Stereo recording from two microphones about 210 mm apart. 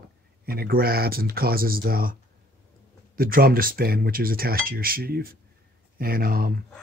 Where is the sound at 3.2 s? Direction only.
45° right (ahead or behind).